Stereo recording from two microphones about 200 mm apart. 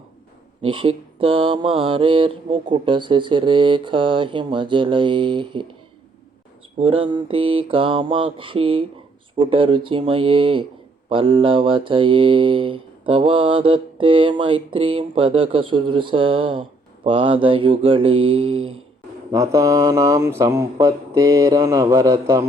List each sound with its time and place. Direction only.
0.6 s mantra: 25° right (ahead or behind)
6.7 s mantra: 25° right (ahead or behind)
19.3 s speech: 15° right (ahead or behind)